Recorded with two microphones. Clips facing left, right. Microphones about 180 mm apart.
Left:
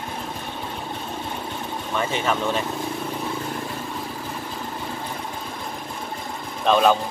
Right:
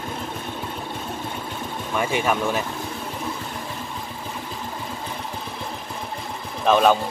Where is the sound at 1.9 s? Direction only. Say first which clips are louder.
Right 2 dB; 10° right (ahead or behind).